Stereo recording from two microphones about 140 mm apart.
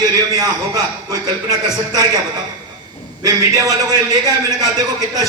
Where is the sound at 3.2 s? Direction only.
25° right (ahead or behind).